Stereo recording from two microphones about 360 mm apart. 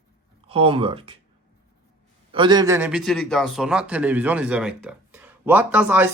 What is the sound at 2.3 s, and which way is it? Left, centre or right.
A man's voice, centre.